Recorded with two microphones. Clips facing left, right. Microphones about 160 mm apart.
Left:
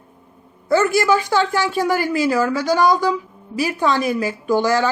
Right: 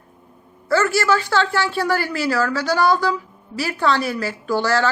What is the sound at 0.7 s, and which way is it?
A woman's voice, 15° left (ahead or behind).